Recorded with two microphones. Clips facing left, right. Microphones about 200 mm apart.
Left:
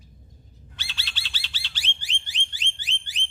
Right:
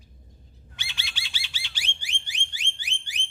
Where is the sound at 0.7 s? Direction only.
15° right (ahead or behind).